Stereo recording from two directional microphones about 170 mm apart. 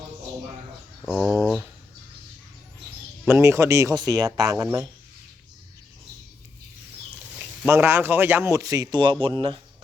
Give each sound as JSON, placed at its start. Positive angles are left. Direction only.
{"t": 1.1, "sound": "speech", "side_deg": 0}
{"t": 3.2, "sound": "speech", "side_deg": -15}
{"t": 7.7, "sound": "speech", "side_deg": -15}